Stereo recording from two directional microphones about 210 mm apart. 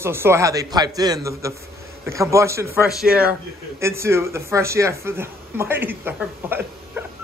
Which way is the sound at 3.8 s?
10° right (ahead or behind).